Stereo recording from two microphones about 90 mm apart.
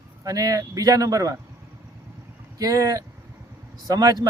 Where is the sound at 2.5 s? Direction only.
40° right (ahead or behind).